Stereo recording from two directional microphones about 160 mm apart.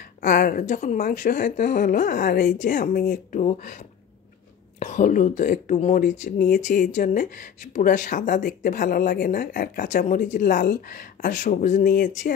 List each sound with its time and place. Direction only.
0.2 s speech: 55° left (ahead or behind)
4.7 s speech: 45° left (ahead or behind)